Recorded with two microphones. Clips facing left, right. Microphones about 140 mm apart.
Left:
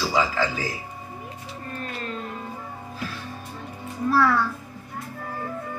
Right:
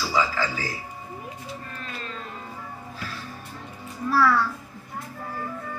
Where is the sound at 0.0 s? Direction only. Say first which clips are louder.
Left 2 dB; 20° left (ahead or behind).